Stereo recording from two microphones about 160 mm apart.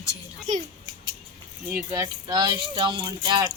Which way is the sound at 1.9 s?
25° right (ahead or behind).